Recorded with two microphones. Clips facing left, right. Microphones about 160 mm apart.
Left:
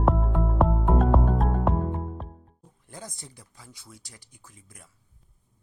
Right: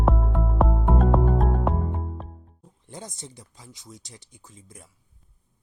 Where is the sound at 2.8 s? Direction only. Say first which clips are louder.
Right 3 dB; 20° right (ahead or behind).